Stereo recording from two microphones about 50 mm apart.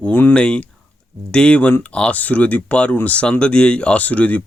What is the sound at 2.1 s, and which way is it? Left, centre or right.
Speech, left.